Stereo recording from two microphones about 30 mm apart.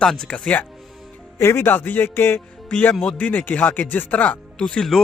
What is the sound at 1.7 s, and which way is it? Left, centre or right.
Speech, left.